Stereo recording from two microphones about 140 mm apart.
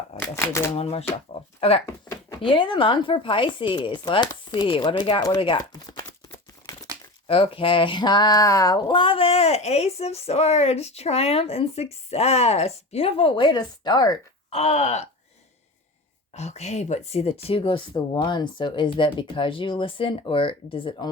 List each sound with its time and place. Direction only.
0.2 s speech: 20° left (ahead or behind)
0.8 s speech: 45° left (ahead or behind)
1.9 s a sound: 20° left (ahead or behind)
2.4 s speech: 35° left (ahead or behind)
5.9 s a sound: 25° left (ahead or behind)
7.3 s speech: 40° left (ahead or behind)
14.5 s speech: 50° left (ahead or behind)
16.3 s speech: 50° left (ahead or behind)